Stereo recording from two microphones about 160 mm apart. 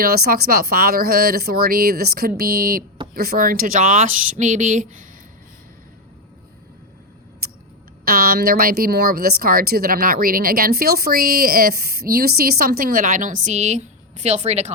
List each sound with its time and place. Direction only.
0.0 s speech: 65° right (ahead or behind); by 5.0 s 50° right (ahead or behind)
7.4 s a sound: 70° right (ahead or behind)
8.0 s a woman's voice: 65° right (ahead or behind); by 14.7 s 45° right (ahead or behind)